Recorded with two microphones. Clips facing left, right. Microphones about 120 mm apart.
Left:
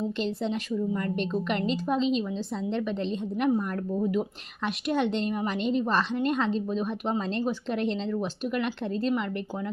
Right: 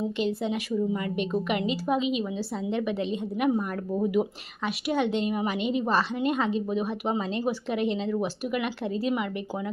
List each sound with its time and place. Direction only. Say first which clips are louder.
0.4 s a woman's voice: right 1 dB; 10° right (ahead or behind)